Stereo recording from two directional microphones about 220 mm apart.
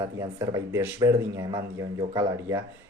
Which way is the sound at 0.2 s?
15° right (ahead or behind).